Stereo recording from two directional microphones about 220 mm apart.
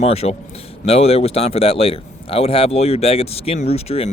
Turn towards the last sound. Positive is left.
turn(degrees=25)  # may be behind; listen again after turning